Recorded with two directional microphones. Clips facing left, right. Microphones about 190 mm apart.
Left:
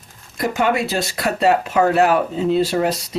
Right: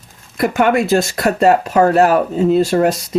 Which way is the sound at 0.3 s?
55° right (ahead or behind).